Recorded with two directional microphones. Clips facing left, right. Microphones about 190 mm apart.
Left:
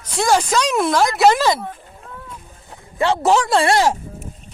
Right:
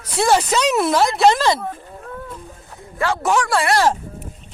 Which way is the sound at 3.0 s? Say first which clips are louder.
Left 3 dB; 25° left (ahead or behind).